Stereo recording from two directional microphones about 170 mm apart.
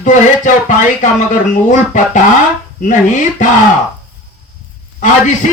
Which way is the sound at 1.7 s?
45° left (ahead or behind).